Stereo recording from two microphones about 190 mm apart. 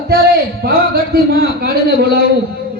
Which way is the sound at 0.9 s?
55° right (ahead or behind).